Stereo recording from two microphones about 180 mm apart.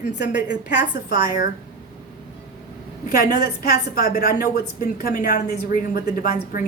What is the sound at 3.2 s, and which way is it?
A woman's voice, 60° left (ahead or behind).